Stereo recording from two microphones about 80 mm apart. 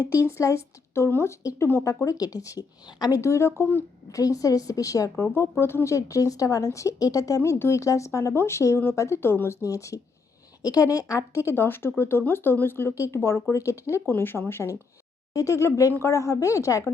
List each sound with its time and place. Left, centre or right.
0.1 s speech: left
3.2 s speech: left
4.1 s a woman's voice: left
14.1 s speech: left